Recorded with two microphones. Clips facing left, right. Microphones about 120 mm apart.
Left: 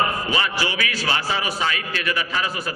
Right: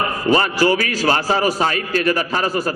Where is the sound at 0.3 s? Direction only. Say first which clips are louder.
Right 9 dB; 45° right (ahead or behind).